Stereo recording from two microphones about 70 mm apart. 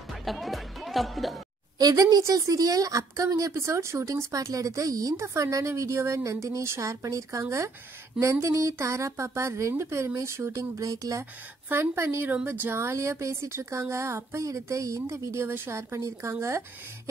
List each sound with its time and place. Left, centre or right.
0.2 s speech: centre
1.8 s speech: right
3.5 s speech: right
5.2 s speech: right
11.7 s speech: right